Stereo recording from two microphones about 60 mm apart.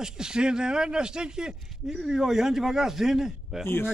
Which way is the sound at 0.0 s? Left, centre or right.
Centre.